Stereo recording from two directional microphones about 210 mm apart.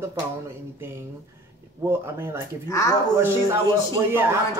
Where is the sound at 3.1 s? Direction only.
10° right (ahead or behind).